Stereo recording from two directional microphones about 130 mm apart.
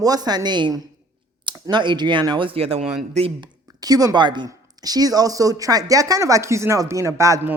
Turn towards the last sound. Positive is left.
turn(degrees=-25)  # may be behind; listen again after turning